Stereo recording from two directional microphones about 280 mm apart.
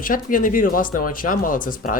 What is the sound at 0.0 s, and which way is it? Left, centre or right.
Speech, left.